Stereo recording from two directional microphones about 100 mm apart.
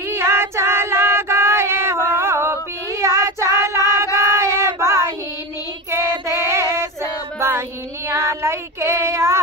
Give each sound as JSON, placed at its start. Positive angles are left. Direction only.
{"t": 0.1, "sound": "female singing", "side_deg": -25}
{"t": 3.8, "sound": "child singing", "side_deg": -25}
{"t": 6.4, "sound": "music", "side_deg": -25}
{"t": 7.3, "sound": "female singing", "side_deg": -25}
{"t": 8.1, "sound": "child singing", "side_deg": -25}